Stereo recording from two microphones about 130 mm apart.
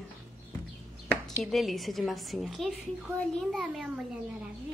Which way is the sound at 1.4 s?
Centre (ahead or behind).